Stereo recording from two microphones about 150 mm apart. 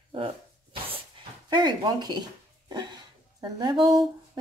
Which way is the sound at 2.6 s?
30° right (ahead or behind).